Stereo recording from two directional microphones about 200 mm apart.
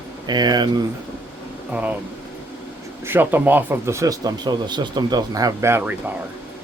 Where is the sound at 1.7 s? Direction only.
10° right (ahead or behind).